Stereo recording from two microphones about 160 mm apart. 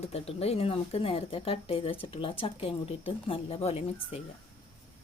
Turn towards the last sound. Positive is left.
turn(degrees=40)  # may be behind; listen again after turning